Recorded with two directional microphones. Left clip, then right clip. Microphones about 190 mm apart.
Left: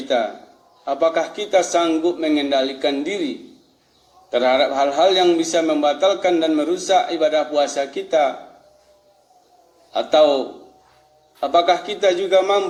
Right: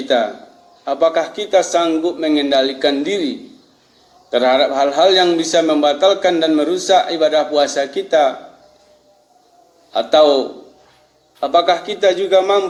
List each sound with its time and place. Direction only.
0.9 s a man's voice: 40° right (ahead or behind)
9.9 s a man's voice: 40° right (ahead or behind)